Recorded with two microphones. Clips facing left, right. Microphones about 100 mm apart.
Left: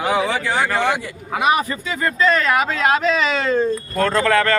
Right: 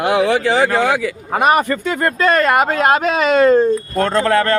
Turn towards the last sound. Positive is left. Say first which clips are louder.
# right 2 dB
turn(degrees=-30)  # may be behind; listen again after turning